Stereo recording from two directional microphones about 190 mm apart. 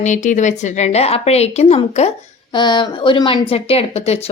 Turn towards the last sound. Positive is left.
turn(degrees=35)  # may be behind; listen again after turning